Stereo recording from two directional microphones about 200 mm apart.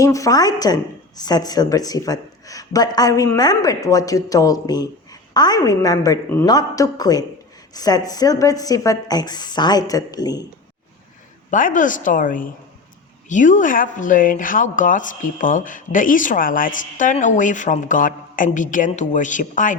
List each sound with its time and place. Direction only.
0.0 s a woman's voice: 15° left (ahead or behind)
11.5 s speech: 40° left (ahead or behind)